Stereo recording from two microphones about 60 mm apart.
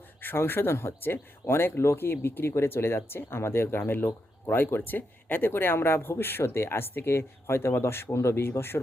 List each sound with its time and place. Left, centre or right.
0.2 s speech: left